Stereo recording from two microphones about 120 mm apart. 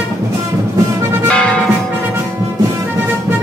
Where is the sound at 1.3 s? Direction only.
10° left (ahead or behind).